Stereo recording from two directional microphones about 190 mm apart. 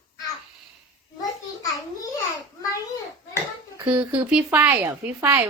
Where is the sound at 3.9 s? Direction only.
5° right (ahead or behind).